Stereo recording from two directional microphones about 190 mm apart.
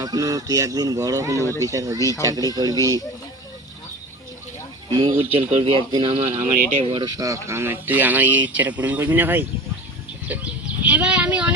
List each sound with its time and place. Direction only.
0.0 s speech: 20° right (ahead or behind)
1.4 s speech: 15° left (ahead or behind)
1.6 s speech: 15° right (ahead or behind)
4.9 s speech: 25° right (ahead or behind); by 11.5 s 5° right (ahead or behind)